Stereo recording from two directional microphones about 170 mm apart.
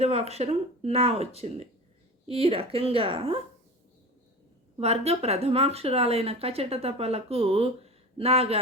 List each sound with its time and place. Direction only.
0.0 s speech: 40° right (ahead or behind)
4.8 s speech: 40° right (ahead or behind)